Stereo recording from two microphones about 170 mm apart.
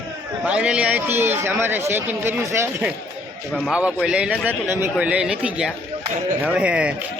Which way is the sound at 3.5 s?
Centre (ahead or behind).